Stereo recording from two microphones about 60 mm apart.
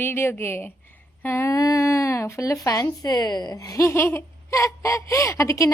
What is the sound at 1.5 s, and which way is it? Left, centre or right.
Speech, left.